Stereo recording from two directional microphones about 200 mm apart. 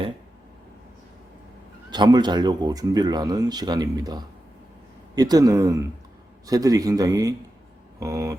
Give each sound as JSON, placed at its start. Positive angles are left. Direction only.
{"t": 1.9, "sound": "a man's voice", "side_deg": -20}